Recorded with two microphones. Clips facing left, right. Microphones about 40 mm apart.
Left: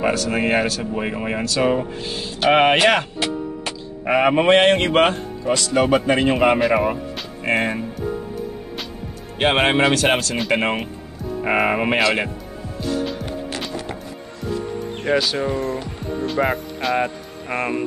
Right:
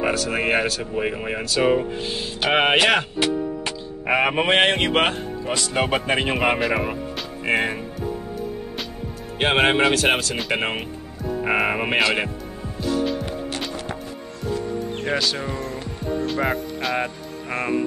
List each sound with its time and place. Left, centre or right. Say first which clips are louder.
0.0 s speech: left 2 dB; centre
6.3 s speech: left 5 dB; centre
9.4 s speech: left 1 dB; centre
12.8 s music: right 1 dB; centre
15.0 s speech: left 6 dB; centre